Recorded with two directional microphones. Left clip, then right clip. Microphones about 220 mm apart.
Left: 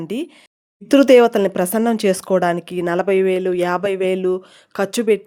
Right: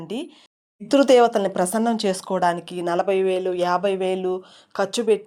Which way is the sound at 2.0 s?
35° left (ahead or behind).